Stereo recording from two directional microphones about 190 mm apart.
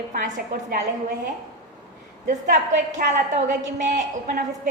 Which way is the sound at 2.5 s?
40° right (ahead or behind).